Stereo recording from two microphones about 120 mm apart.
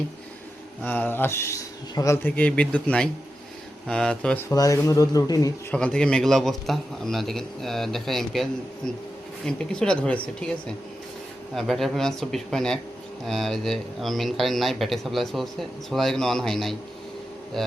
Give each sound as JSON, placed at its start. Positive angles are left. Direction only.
{"t": 0.8, "sound": "speech", "side_deg": 15}
{"t": 2.2, "sound": "speech", "side_deg": 10}
{"t": 4.4, "sound": "speech", "side_deg": 25}
{"t": 5.7, "sound": "speech", "side_deg": 10}
{"t": 9.5, "sound": "speech", "side_deg": 5}
{"t": 11.5, "sound": "speech", "side_deg": 0}